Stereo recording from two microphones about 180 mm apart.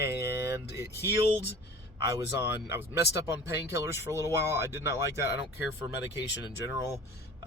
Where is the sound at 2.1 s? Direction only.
15° right (ahead or behind).